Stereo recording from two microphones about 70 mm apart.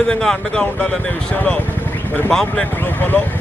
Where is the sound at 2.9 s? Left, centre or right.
Left.